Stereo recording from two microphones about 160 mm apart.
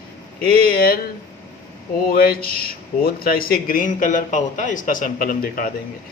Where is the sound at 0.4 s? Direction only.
65° left (ahead or behind).